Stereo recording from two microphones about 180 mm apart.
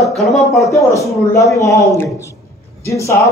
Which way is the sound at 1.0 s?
15° left (ahead or behind).